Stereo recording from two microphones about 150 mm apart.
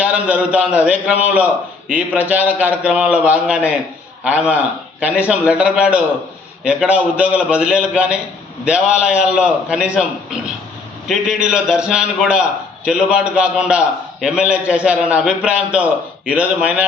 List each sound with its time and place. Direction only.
0.0 s a man's voice: 10° right (ahead or behind)
11.1 s a man's voice: 5° right (ahead or behind)